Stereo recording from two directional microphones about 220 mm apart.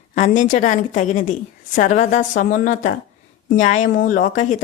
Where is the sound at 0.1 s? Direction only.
35° left (ahead or behind).